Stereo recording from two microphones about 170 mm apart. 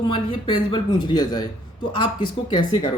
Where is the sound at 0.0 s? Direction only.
25° left (ahead or behind).